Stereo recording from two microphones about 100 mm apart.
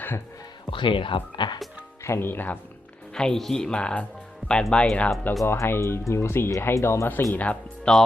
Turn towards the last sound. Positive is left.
turn(degrees=15)  # may be behind; listen again after turning